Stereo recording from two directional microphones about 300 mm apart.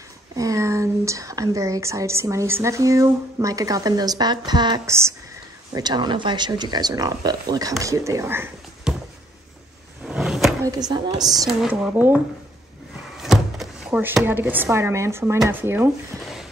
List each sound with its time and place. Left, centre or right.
0.4 s speech: centre
10.0 s drawer open or close: centre
11.3 s speech: centre
13.2 s speech: centre